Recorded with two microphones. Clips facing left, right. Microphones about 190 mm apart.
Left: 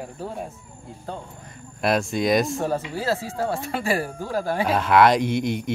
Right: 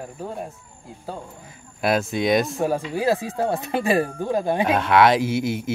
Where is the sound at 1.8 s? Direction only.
Centre (ahead or behind).